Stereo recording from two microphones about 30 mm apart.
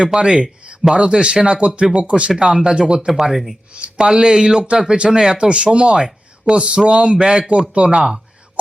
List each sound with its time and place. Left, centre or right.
0.0 s speech: right
2.4 s speech: right
3.2 s speech: centre
3.9 s speech: right
7.7 s speech: right
7.9 s speech: right